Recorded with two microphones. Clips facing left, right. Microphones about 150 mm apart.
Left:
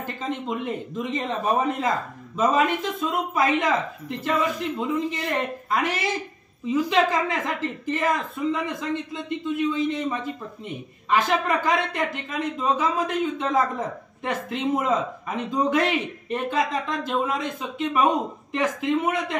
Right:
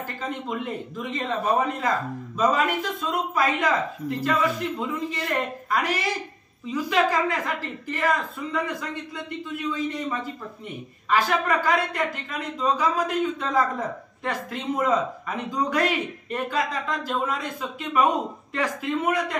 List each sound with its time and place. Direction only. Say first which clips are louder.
0.0 s speech: left 2 dB; 20° left (ahead or behind)